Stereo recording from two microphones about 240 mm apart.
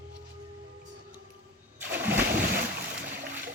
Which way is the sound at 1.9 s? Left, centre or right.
Centre.